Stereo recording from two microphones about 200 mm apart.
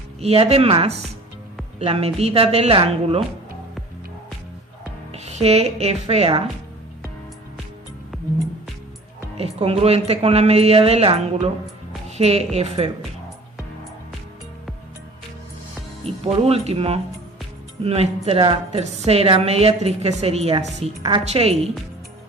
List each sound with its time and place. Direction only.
0.2 s speech: 30° right (ahead or behind)
5.2 s a woman's voice: 30° right (ahead or behind)
9.4 s a woman's voice: 30° right (ahead or behind)
16.0 s a woman's voice: 30° right (ahead or behind)